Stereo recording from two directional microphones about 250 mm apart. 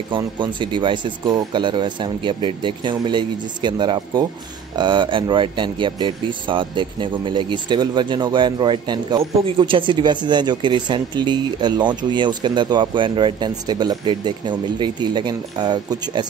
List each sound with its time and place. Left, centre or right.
0.1 s speech: centre